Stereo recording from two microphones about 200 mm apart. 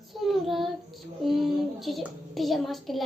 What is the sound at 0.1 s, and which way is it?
Child singing, centre (ahead or behind).